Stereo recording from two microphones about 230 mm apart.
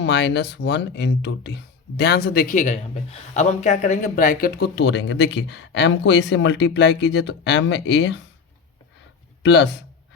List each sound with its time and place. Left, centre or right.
0.0 s speech: left
9.4 s speech: left